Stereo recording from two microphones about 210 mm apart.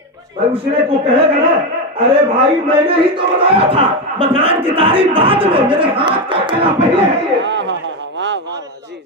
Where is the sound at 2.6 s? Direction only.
25° right (ahead or behind).